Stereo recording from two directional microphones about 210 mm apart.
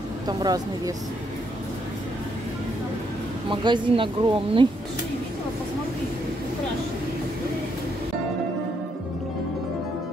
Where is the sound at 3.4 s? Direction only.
25° right (ahead or behind).